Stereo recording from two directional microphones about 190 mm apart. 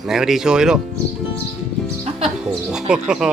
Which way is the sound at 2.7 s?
5° right (ahead or behind).